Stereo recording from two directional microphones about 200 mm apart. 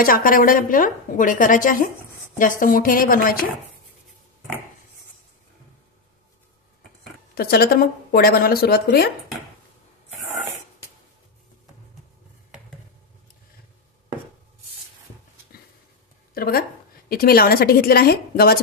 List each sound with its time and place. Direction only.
0.0 s a woman's voice: 45° left (ahead or behind)
7.3 s a woman's voice: 50° left (ahead or behind)
16.3 s a woman's voice: 50° left (ahead or behind)